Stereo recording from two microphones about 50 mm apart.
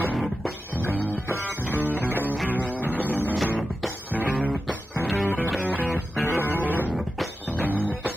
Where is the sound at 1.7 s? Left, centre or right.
Right.